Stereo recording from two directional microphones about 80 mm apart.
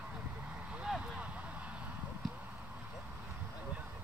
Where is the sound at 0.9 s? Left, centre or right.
Centre.